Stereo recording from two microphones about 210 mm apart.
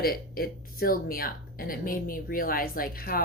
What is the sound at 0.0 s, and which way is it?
A woman's voice, 45° left (ahead or behind).